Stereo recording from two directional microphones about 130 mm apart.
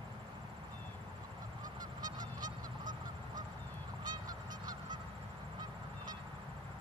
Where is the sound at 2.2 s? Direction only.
90° right.